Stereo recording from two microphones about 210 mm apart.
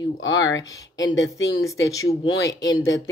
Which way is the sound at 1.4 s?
15° left (ahead or behind).